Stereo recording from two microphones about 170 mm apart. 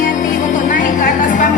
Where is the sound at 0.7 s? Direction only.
50° left (ahead or behind).